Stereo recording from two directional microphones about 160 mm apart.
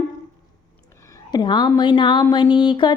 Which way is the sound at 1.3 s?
25° left (ahead or behind).